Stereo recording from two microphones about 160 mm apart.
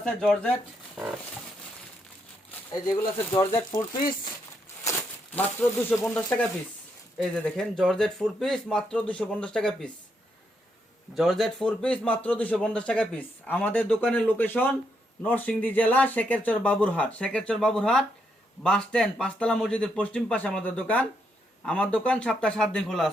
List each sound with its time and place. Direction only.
0.0 s speech: 5° left (ahead or behind)
3.5 s speech: 25° left (ahead or behind)
4.9 s speech: 10° left (ahead or behind)
11.1 s a man's voice: centre (ahead or behind)